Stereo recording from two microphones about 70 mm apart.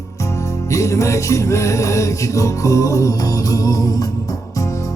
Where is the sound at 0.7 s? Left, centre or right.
Left.